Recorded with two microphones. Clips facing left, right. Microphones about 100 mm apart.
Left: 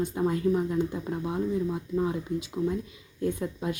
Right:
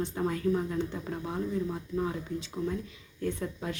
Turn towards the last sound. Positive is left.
turn(degrees=15)  # may be behind; listen again after turning